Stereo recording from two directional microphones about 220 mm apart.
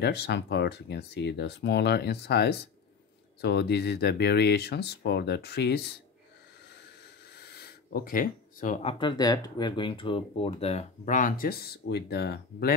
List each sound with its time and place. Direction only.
0.0 s speech: 50° left (ahead or behind)
7.3 s speech: 45° left (ahead or behind)